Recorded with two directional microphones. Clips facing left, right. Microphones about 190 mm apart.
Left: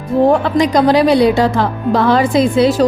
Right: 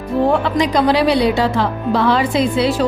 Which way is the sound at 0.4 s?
45° left (ahead or behind).